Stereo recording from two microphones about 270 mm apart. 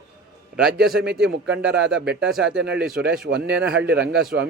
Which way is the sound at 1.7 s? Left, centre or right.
Right.